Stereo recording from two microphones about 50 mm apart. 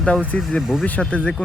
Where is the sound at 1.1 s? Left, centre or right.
Left.